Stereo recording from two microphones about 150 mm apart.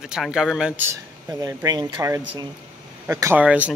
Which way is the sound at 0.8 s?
15° right (ahead or behind).